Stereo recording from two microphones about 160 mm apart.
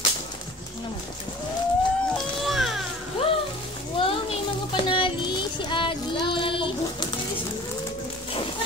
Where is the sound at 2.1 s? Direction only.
Centre (ahead or behind).